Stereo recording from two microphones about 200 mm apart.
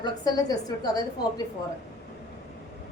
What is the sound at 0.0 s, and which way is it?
Speech, 20° left (ahead or behind).